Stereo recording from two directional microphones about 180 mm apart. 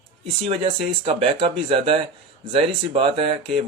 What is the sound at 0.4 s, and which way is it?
Speech, 30° right (ahead or behind).